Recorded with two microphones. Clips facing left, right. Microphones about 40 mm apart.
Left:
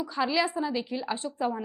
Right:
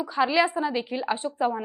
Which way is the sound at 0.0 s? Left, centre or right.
Centre.